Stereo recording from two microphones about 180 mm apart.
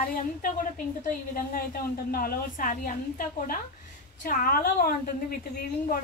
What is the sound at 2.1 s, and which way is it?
A woman's voice, 55° left (ahead or behind).